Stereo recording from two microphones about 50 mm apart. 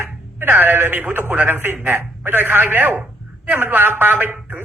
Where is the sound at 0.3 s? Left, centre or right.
Right.